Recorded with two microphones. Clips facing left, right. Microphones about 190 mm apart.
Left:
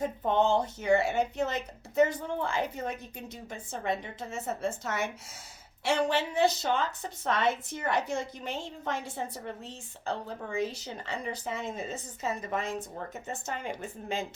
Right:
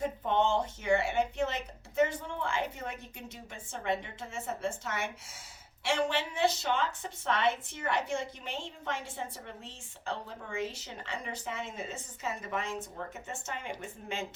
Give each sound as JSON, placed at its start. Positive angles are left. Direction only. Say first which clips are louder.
{"t": 0.0, "sound": "a woman's voice", "louder": "left 2 dB", "side_deg": 40}